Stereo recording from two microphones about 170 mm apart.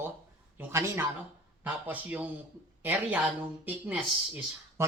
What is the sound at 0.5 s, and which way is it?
A man's voice, 15° right (ahead or behind).